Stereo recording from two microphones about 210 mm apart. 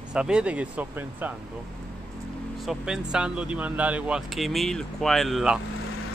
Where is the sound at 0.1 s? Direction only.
5° right (ahead or behind).